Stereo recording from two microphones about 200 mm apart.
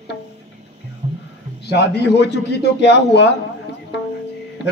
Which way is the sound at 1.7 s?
55° left (ahead or behind).